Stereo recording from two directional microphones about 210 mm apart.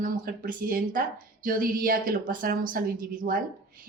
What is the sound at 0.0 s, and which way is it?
A woman's voice, 40° right (ahead or behind).